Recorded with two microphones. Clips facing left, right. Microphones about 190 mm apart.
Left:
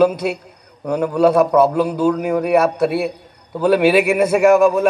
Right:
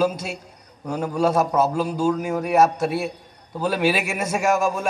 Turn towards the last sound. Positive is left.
turn(degrees=60)  # may be behind; listen again after turning